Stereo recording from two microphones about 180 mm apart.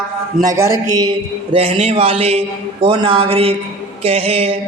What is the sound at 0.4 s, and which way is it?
Speech, 15° right (ahead or behind).